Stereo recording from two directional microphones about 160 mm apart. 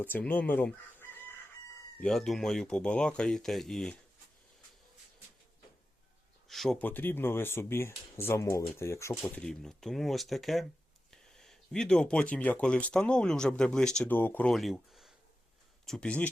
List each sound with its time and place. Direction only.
0.0 s chicken: 10° left (ahead or behind)
2.0 s speech: centre (ahead or behind)
6.5 s speech: centre (ahead or behind); by 9.1 s 20° left (ahead or behind)
9.2 s speech: 5° left (ahead or behind)